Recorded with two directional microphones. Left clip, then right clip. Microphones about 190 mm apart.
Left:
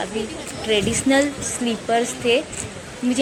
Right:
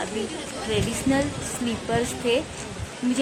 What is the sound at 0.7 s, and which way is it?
Speech, 20° left (ahead or behind).